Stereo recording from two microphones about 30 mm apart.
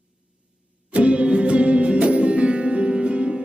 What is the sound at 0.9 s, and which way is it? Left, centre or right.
Music, right.